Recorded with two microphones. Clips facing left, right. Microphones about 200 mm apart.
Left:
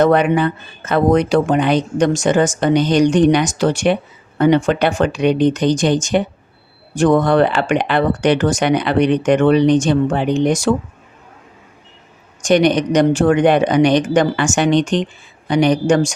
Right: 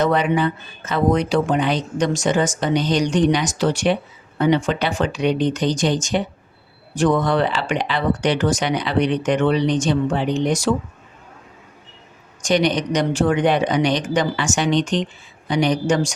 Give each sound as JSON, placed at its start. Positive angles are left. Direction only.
{"t": 0.0, "sound": "speech", "side_deg": 55}
{"t": 12.5, "sound": "speech", "side_deg": 55}